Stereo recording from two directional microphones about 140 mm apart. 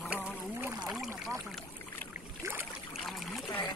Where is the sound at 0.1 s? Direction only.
10° right (ahead or behind).